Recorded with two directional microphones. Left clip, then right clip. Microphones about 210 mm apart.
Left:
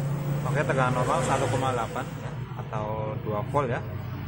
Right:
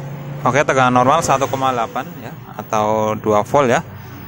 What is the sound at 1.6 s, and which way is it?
Speech, 35° right (ahead or behind).